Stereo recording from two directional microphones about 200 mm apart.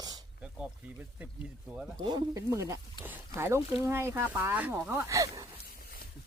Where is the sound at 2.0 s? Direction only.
20° right (ahead or behind).